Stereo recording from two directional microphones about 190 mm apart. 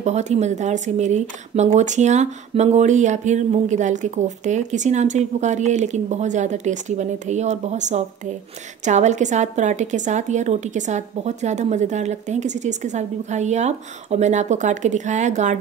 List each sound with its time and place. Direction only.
0.0 s speech: 35° right (ahead or behind)